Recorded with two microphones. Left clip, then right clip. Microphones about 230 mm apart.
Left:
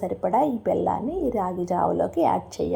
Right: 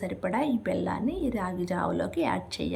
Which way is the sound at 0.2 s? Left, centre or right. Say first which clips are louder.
Left 7 dB; centre.